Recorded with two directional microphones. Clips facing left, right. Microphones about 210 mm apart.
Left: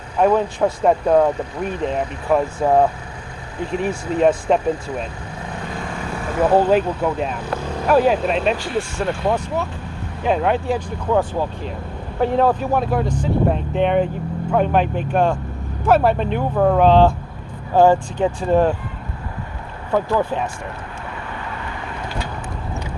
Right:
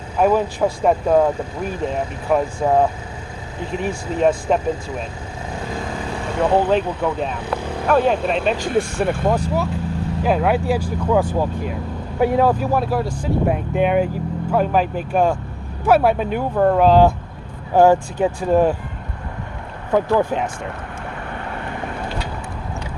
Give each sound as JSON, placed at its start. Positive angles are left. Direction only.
{"t": 0.2, "sound": "speech", "side_deg": -5}
{"t": 6.2, "sound": "vehicle", "side_deg": 5}
{"t": 7.0, "sound": "speech", "side_deg": 5}
{"t": 8.5, "sound": "speech", "side_deg": -45}
{"t": 9.0, "sound": "speech", "side_deg": -5}
{"t": 19.9, "sound": "speech", "side_deg": -15}
{"t": 21.3, "sound": "vehicle", "side_deg": -50}